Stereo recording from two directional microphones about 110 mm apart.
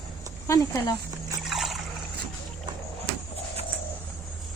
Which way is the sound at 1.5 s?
Centre (ahead or behind).